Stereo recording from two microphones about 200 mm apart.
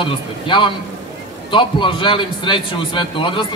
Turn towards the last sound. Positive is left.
turn(degrees=25)  # may be behind; listen again after turning